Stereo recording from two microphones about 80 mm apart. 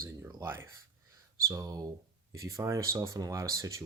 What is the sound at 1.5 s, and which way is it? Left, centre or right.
Speech, right.